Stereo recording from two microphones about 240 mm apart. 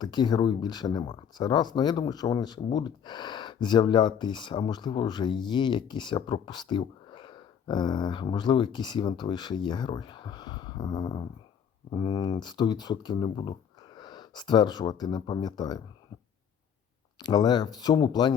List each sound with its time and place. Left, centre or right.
0.0 s speech: centre
17.2 s speech: centre